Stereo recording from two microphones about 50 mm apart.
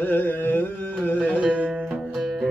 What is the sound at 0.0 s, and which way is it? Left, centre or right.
Carnatic music, left.